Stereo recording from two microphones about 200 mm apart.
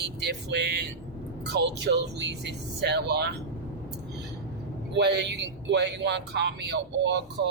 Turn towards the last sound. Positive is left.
turn(degrees=-60)  # may be behind; listen again after turning